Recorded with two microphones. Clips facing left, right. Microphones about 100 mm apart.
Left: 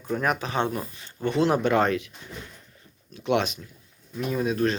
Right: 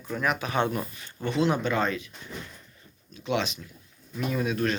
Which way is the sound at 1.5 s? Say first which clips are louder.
Left 4 dB; 65° left (ahead or behind).